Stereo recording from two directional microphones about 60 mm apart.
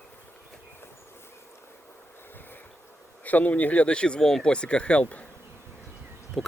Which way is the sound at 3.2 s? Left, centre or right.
Left.